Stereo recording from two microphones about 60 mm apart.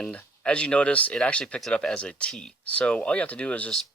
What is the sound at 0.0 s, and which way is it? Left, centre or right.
Speech, centre.